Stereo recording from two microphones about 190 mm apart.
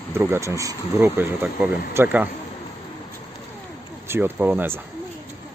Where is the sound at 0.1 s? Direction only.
10° right (ahead or behind).